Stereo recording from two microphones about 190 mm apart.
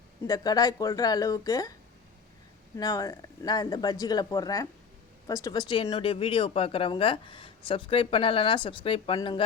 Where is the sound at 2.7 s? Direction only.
20° left (ahead or behind).